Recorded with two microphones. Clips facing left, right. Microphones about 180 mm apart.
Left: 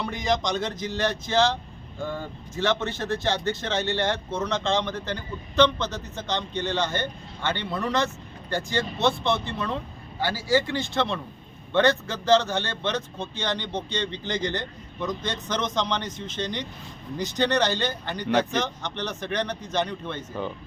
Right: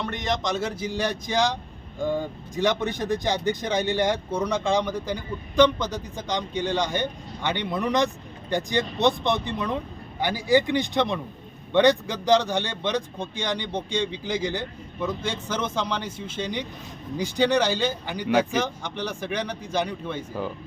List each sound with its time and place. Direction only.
0.0 s speech: centre (ahead or behind)